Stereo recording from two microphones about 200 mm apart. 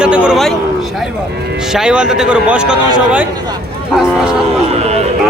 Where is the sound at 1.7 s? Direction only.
5° right (ahead or behind).